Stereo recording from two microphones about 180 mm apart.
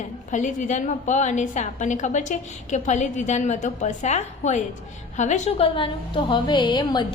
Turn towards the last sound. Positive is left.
turn(degrees=25)  # may be behind; listen again after turning